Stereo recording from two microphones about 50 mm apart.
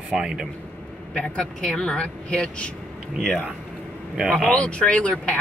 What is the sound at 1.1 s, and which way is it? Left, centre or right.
Speech, left.